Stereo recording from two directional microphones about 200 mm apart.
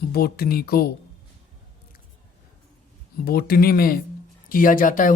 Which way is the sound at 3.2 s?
50° left (ahead or behind).